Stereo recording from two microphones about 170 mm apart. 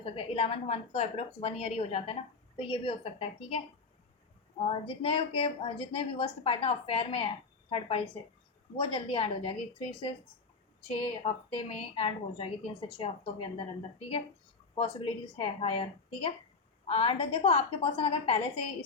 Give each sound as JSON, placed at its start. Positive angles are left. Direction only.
{"t": 0.0, "sound": "a woman's voice", "side_deg": 35}
{"t": 4.7, "sound": "a woman's voice", "side_deg": 35}
{"t": 14.8, "sound": "a woman's voice", "side_deg": 30}